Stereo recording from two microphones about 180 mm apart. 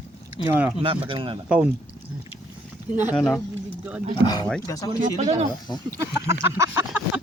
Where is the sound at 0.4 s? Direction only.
10° right (ahead or behind).